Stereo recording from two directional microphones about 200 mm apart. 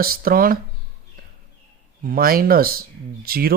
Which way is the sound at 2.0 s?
45° right (ahead or behind).